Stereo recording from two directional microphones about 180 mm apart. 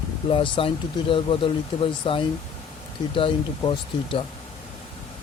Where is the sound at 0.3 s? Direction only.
30° left (ahead or behind).